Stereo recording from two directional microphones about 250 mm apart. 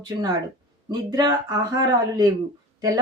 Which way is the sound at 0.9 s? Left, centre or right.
Centre.